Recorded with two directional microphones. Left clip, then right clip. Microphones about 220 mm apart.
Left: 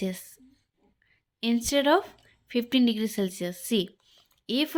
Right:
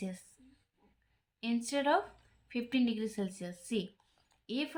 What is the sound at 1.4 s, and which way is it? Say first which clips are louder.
Speech: left 8 dB; 40° left (ahead or behind).